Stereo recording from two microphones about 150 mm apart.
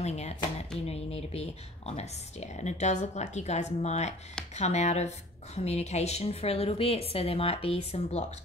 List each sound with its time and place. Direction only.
0.0 s a woman's voice: 45° left (ahead or behind)